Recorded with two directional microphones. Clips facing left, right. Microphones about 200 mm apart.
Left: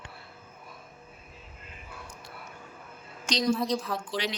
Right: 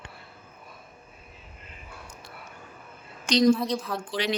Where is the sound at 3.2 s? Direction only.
55° right (ahead or behind).